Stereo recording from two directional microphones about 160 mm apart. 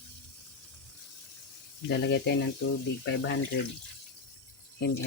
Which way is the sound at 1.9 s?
90° left.